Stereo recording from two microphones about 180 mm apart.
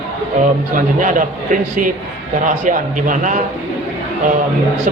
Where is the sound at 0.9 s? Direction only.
45° right (ahead or behind).